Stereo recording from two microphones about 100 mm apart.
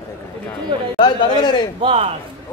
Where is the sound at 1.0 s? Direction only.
50° left (ahead or behind).